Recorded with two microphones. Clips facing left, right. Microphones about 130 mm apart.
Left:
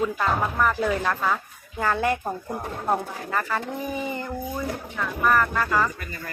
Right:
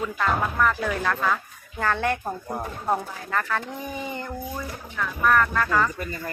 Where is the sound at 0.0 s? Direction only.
10° left (ahead or behind).